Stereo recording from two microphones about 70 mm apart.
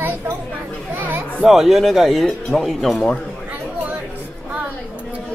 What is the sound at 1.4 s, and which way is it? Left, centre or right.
Speech, centre.